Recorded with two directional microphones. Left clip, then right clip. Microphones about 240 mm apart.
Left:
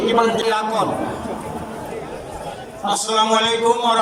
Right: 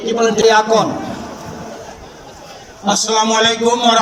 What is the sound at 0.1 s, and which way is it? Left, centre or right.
Speech, right.